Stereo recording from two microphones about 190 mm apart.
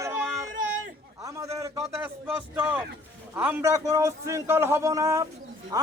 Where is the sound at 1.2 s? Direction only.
15° right (ahead or behind).